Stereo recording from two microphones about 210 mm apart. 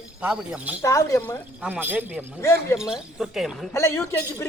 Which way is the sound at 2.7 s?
5° right (ahead or behind).